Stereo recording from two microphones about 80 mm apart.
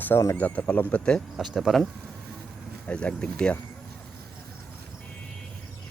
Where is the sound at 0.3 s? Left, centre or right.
Left.